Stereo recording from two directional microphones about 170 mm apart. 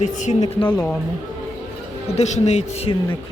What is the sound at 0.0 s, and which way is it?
Speech, 45° left (ahead or behind).